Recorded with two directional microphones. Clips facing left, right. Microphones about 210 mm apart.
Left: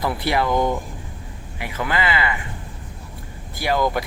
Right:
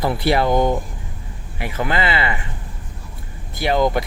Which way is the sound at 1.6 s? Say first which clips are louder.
Right 2 dB; 30° right (ahead or behind).